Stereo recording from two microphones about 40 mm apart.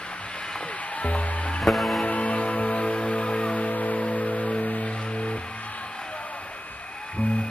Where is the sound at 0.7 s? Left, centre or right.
Left.